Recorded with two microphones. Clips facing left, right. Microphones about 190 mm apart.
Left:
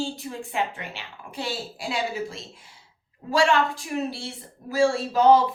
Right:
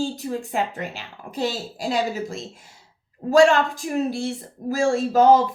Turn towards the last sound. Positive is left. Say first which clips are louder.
# right 3 dB
turn(degrees=-45)  # may be behind; listen again after turning